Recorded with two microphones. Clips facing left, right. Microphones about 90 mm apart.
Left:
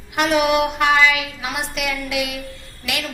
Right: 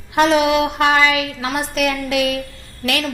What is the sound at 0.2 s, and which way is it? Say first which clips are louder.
A woman's voice: right 3 dB; 30° right (ahead or behind).